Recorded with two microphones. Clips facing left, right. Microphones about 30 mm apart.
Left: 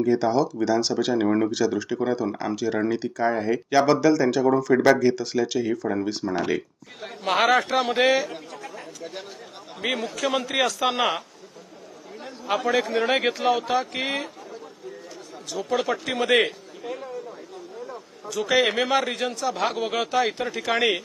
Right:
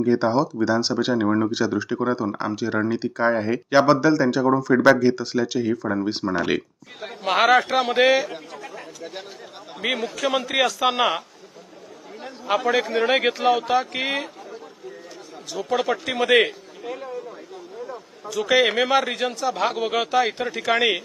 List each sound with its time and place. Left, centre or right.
0.0 s speech: right
0.7 s a man's voice: centre
1.2 s speech: centre
1.5 s a man's voice: centre
3.2 s speech: right
3.8 s a man's voice: centre
6.3 s speech: right
7.0 s a man's voice: centre
12.2 s a man's voice: centre